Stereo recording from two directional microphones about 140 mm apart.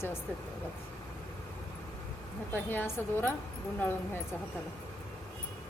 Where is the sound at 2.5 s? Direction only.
15° left (ahead or behind).